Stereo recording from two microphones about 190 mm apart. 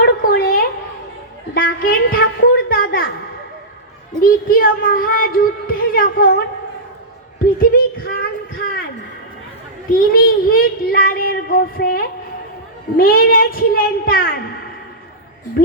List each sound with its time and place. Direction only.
0.0 s a sound: 50° left (ahead or behind)
4.2 s speech: 50° left (ahead or behind)
7.6 s child singing: 50° left (ahead or behind)
9.9 s speech: 50° left (ahead or behind)